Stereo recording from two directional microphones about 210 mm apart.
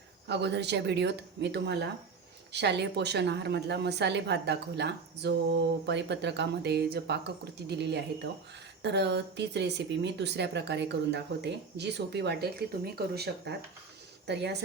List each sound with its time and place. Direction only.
0.3 s speech: 55° right (ahead or behind)